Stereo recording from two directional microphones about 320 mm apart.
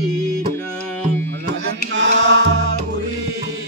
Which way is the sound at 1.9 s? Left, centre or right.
Right.